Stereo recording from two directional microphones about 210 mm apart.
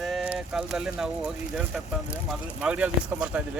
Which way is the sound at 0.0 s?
Centre (ahead or behind).